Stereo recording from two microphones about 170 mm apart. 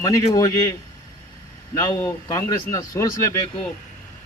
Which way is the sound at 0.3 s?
20° left (ahead or behind).